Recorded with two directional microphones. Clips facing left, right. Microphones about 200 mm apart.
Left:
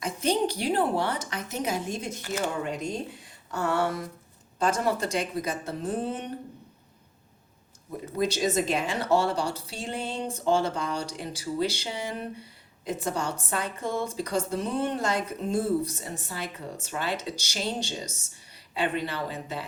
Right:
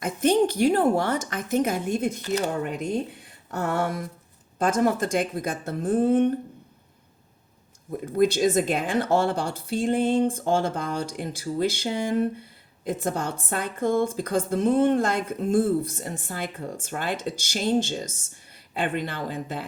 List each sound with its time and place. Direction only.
0.0 s a woman's voice: 55° right (ahead or behind)
8.0 s a woman's voice: 50° right (ahead or behind)